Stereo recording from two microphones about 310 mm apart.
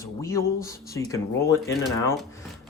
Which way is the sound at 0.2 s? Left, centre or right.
Centre.